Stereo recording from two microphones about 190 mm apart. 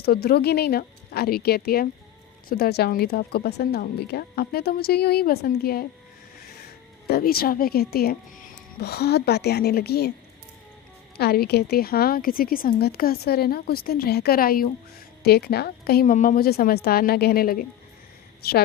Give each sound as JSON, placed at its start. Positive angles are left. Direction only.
{"t": 0.0, "sound": "speech", "side_deg": 55}
{"t": 7.1, "sound": "a woman's voice", "side_deg": 50}
{"t": 11.2, "sound": "a woman's voice", "side_deg": 55}